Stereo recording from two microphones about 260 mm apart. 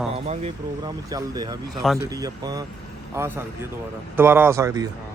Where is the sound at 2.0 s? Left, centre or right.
Centre.